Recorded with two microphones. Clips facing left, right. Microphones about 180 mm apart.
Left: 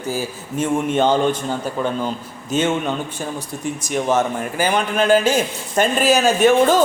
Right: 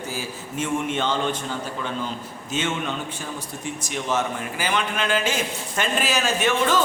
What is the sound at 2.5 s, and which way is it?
A man's voice, 40° left (ahead or behind).